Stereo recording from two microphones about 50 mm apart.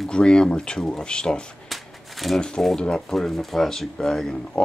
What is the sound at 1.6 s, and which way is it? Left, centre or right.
Shuffling cards, centre.